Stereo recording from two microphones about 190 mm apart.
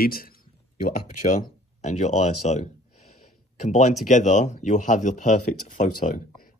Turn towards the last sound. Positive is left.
turn(degrees=45)  # may be behind; listen again after turning